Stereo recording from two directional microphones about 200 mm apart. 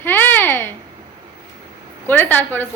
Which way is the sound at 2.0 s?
10° left (ahead or behind).